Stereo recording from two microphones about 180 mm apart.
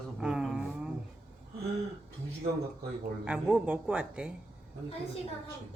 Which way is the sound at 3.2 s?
5° right (ahead or behind).